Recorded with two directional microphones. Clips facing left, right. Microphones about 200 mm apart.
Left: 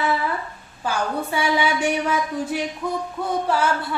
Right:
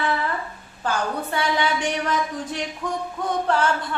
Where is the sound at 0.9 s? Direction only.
10° left (ahead or behind).